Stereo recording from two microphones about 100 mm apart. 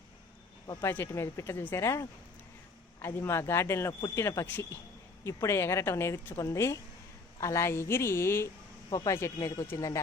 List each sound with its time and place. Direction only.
0.7 s a woman's voice: 25° left (ahead or behind)
8.9 s speech: 40° left (ahead or behind)